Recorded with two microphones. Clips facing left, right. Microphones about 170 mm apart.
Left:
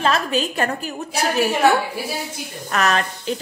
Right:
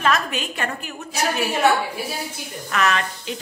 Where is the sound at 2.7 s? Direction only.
40° left (ahead or behind).